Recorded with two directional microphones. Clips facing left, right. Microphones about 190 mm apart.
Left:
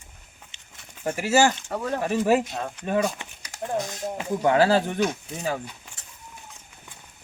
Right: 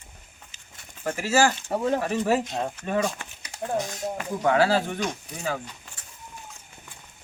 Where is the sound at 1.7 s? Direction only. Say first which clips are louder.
Right 4 dB; 25° right (ahead or behind).